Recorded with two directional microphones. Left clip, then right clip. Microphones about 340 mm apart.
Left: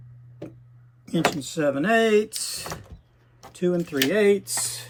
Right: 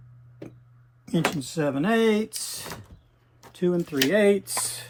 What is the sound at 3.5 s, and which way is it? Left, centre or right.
Speech, centre.